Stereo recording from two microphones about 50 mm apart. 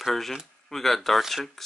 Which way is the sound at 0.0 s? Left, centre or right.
Centre.